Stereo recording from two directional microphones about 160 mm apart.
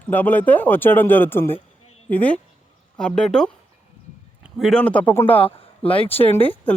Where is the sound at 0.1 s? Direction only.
10° left (ahead or behind).